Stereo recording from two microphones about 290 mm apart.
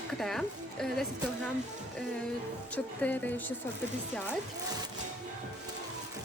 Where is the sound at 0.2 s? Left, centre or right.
Centre.